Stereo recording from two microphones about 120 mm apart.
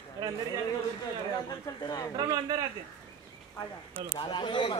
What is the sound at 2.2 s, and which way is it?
Speech, 35° right (ahead or behind).